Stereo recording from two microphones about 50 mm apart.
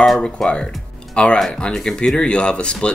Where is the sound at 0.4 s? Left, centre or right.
Centre.